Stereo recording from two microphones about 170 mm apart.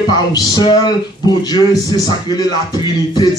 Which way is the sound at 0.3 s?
25° left (ahead or behind).